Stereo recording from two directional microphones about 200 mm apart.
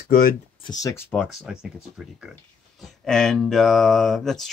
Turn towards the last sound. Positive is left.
turn(degrees=0)  # may be behind; listen again after turning